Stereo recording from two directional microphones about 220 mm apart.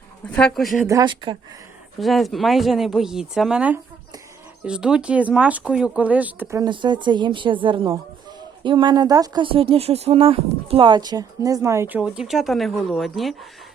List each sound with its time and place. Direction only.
0.3 s speech: centre (ahead or behind)
0.9 s speech: 20° right (ahead or behind)
2.0 s speech: centre (ahead or behind)